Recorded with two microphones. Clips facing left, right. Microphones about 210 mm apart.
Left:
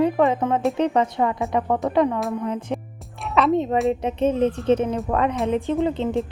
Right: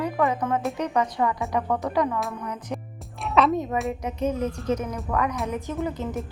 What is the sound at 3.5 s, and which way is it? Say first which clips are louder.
Speech: left 6 dB; 25° left (ahead or behind).